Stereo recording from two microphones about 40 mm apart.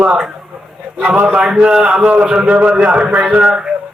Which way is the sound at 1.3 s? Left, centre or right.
Right.